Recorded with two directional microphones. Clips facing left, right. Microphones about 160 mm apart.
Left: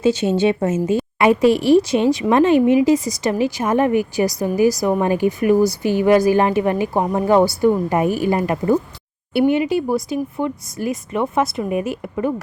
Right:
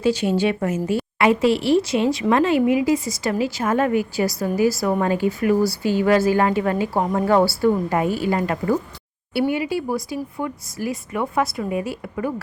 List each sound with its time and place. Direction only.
0.0 s a woman's voice: 25° left (ahead or behind)